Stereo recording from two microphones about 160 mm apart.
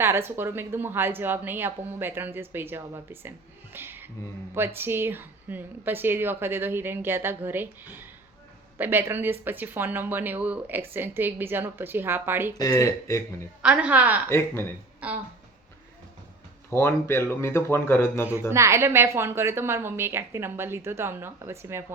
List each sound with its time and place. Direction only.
0.0 s a woman's voice: 15° right (ahead or behind)
12.5 s speech: 20° left (ahead or behind)
13.6 s a woman's voice: 10° right (ahead or behind)
14.3 s speech: 15° left (ahead or behind)
15.0 s a woman's voice: 10° right (ahead or behind)
16.6 s speech: 15° left (ahead or behind)
18.5 s a woman's voice: 15° right (ahead or behind)